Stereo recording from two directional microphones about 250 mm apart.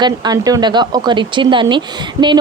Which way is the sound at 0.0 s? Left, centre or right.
Centre.